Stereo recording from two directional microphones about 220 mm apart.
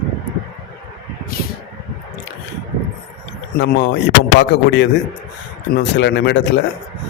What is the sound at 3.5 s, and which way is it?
A man's voice, 50° left (ahead or behind).